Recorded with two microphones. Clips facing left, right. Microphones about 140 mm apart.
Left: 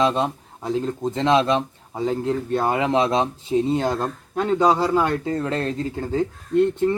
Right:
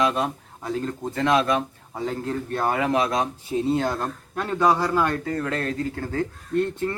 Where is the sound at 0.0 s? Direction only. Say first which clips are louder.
Left 3 dB; 25° left (ahead or behind).